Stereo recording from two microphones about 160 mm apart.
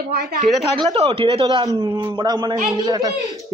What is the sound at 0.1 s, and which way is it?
Speech, 80° right.